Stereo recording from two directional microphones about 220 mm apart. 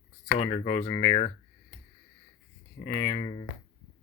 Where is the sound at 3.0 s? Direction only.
25° left (ahead or behind).